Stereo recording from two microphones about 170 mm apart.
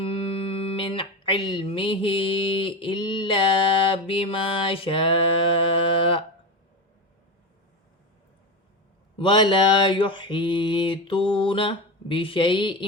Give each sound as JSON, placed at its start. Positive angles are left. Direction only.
{"t": 0.0, "sound": "speech", "side_deg": 35}
{"t": 9.1, "sound": "mantra", "side_deg": 30}